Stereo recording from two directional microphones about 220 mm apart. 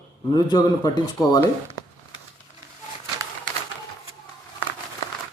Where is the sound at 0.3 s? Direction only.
20° left (ahead or behind).